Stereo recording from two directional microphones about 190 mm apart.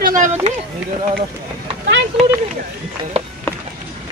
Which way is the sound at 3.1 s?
30° right (ahead or behind).